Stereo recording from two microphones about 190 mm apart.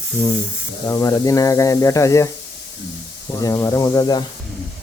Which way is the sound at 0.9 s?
20° left (ahead or behind).